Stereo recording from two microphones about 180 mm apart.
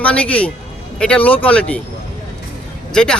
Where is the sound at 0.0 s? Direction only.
5° left (ahead or behind).